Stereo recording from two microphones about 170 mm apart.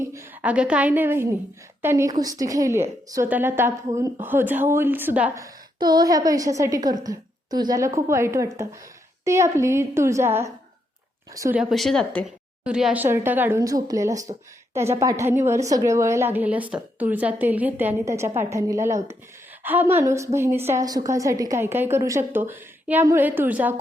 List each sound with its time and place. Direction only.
0.0 s a woman's voice: 15° right (ahead or behind)
5.4 s a woman's voice: 25° right (ahead or behind)
11.5 s a woman's voice: centre (ahead or behind)